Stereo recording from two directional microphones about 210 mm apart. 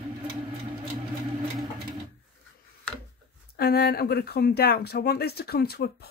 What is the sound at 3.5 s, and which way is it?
Speech, 50° left (ahead or behind).